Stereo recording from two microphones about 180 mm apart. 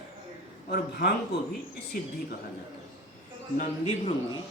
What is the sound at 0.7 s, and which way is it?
Speech, 65° left (ahead or behind).